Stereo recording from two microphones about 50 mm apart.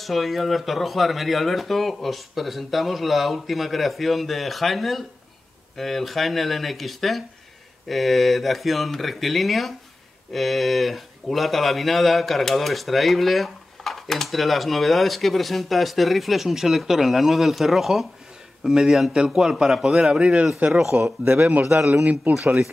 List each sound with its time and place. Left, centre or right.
0.0 s a man's voice: centre
19.1 s a man's voice: centre
19.7 s a man's voice: centre
20.0 s a man's voice: centre
22.0 s speech: right